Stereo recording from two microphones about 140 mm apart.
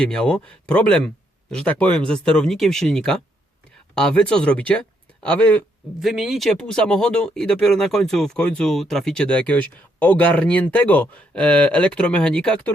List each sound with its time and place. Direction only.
0.0 s speech: 5° left (ahead or behind)
6.0 s speech: centre (ahead or behind)